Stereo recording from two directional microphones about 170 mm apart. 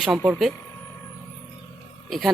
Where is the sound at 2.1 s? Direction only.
Centre (ahead or behind).